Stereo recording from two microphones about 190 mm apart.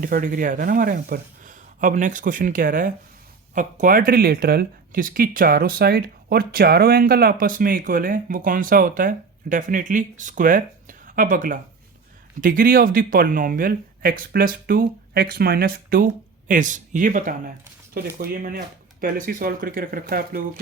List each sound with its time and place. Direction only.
0.0 s speech: 45° right (ahead or behind)